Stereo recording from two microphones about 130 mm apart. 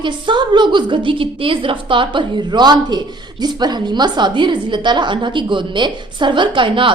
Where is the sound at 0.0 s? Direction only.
35° right (ahead or behind).